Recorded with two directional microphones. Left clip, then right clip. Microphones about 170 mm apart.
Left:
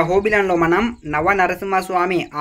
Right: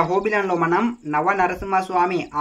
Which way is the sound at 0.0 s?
25° left (ahead or behind).